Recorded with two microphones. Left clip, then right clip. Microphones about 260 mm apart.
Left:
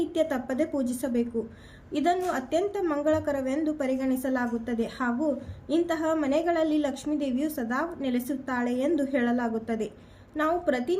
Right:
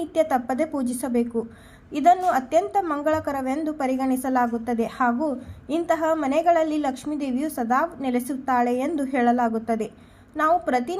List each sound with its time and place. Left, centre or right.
0.0 s a woman's voice: centre